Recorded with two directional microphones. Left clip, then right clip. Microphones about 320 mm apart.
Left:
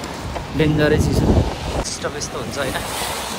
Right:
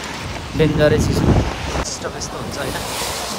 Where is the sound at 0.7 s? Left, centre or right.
Centre.